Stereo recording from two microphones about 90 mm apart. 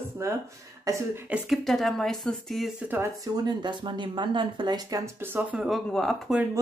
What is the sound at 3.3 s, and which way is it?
Speech, 55° right (ahead or behind).